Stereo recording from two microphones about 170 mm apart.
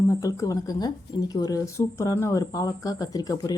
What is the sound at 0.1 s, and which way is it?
Speech, 20° left (ahead or behind).